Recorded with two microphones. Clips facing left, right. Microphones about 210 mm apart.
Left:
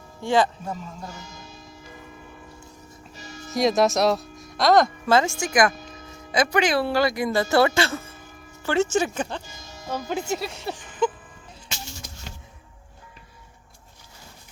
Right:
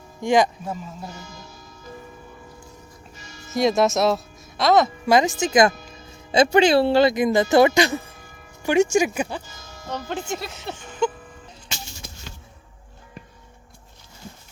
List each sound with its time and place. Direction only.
0.2 s speech: 15° right (ahead or behind)
3.5 s speech: centre (ahead or behind)
5.0 s speech: 15° right (ahead or behind)
9.8 s speech: 10° left (ahead or behind)